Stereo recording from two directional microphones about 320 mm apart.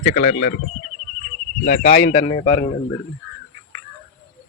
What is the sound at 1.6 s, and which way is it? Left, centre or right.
Speech, left.